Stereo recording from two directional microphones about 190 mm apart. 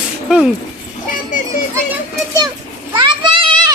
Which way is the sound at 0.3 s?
5° right (ahead or behind).